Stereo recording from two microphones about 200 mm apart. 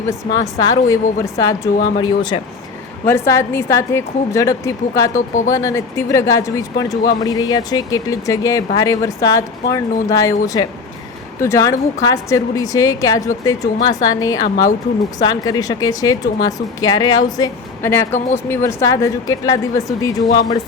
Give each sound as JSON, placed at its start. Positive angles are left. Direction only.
{"t": 0.1, "sound": "speech", "side_deg": 15}